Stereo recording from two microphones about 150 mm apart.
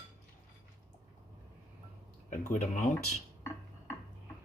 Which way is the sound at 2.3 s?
60° left (ahead or behind).